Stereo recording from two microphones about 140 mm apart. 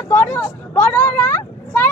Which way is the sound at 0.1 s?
10° left (ahead or behind).